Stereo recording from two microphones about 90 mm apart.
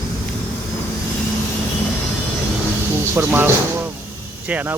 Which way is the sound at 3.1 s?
25° right (ahead or behind).